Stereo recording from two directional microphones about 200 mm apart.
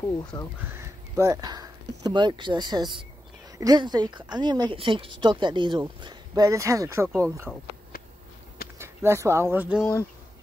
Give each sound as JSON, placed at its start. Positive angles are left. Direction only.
{"t": 0.3, "sound": "speech", "side_deg": 15}
{"t": 0.7, "sound": "speech", "side_deg": -15}
{"t": 8.7, "sound": "speech", "side_deg": -15}